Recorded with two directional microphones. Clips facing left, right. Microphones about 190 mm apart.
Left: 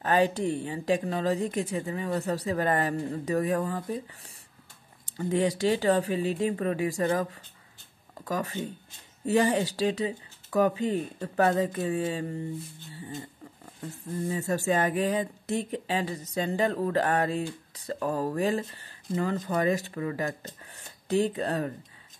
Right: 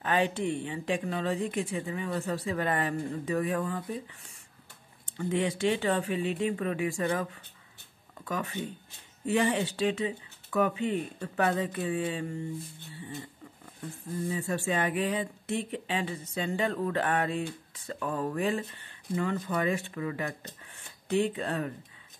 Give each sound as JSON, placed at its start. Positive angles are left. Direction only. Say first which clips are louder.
{"t": 0.0, "sound": "speech", "louder": "left 3 dB", "side_deg": 40}
{"t": 14.3, "sound": "speech", "louder": "left 4 dB", "side_deg": 40}